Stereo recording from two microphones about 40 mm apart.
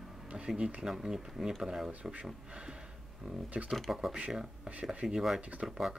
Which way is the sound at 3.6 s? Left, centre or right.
Centre.